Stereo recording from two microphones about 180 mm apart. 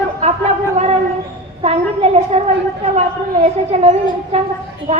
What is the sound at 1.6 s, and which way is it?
A woman's voice, 35° right (ahead or behind).